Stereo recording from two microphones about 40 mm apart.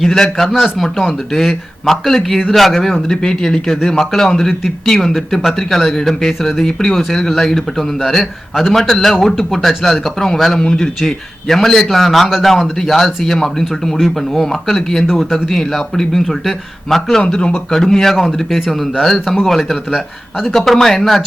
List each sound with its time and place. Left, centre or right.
0.0 s speech: centre
14.0 s speech: centre
14.4 s speech: centre